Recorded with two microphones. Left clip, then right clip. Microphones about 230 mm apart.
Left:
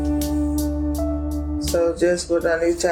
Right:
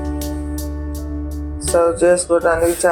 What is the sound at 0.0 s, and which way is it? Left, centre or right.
Music, centre.